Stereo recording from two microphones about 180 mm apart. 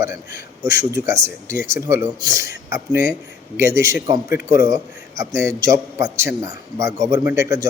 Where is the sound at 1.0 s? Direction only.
15° right (ahead or behind).